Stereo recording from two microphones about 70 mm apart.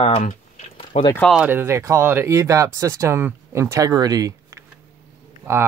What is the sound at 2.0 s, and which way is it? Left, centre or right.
Speech, right.